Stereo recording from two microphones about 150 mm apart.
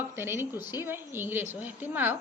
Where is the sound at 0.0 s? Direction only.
15° right (ahead or behind).